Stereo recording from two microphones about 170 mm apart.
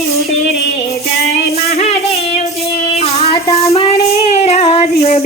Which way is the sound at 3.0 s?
35° left (ahead or behind).